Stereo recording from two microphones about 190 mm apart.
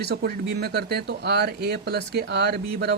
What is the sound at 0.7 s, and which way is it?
Speech, 60° right (ahead or behind).